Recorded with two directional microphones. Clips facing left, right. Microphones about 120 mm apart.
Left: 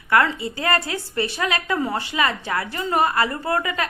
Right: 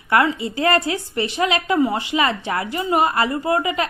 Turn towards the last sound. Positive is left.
turn(degrees=-20)  # may be behind; listen again after turning